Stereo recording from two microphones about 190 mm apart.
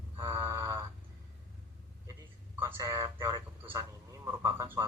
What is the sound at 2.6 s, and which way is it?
A man's voice, 20° right (ahead or behind).